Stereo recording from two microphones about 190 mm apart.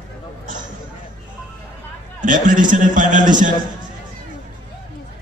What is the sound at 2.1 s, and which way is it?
A man's voice, 45° right (ahead or behind).